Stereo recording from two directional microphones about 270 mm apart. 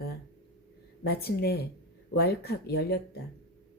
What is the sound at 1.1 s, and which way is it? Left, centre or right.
A woman's voice, left.